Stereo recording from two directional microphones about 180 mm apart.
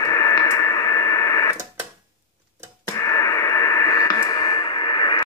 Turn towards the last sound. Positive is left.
turn(degrees=25)  # may be behind; listen again after turning